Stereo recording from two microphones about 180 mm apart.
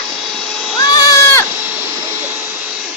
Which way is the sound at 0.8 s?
20° left (ahead or behind).